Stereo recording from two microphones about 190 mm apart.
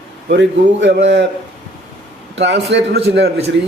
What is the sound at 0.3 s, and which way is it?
Speech, 65° right (ahead or behind).